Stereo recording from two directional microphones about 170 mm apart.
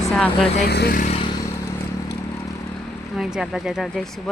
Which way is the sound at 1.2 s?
25° left (ahead or behind).